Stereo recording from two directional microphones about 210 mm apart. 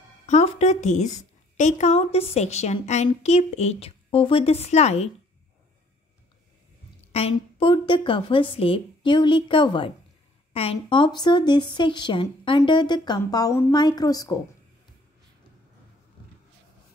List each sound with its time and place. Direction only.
0.3 s a woman's voice: 30° left (ahead or behind)
7.1 s a woman's voice: 30° left (ahead or behind)